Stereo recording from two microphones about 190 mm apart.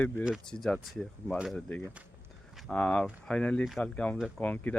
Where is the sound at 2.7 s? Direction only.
5° left (ahead or behind).